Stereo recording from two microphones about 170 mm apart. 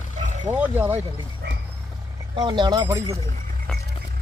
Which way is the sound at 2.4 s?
25° right (ahead or behind).